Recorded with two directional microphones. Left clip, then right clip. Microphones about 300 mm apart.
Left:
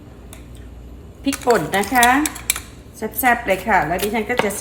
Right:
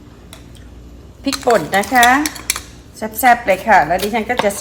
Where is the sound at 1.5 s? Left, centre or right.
Right.